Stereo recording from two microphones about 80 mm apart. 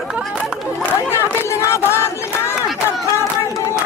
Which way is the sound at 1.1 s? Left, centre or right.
Left.